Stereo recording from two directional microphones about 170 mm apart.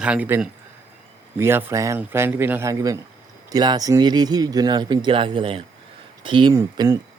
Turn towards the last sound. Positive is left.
turn(degrees=-20)  # may be behind; listen again after turning